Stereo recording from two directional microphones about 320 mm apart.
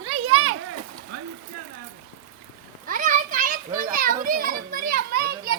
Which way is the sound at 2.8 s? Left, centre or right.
Right.